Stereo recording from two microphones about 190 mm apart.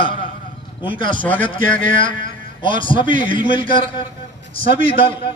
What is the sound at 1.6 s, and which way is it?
Speech, 45° right (ahead or behind).